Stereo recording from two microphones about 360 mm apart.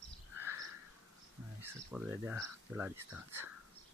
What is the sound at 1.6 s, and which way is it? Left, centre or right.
Speech, centre.